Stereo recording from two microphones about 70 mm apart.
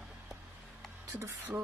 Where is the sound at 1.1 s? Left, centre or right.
Right.